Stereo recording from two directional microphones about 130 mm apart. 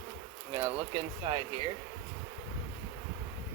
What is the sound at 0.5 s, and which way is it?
Speech, 35° right (ahead or behind).